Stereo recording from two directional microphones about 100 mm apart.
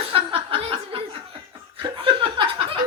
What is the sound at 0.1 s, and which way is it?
Chuckle, 65° right (ahead or behind).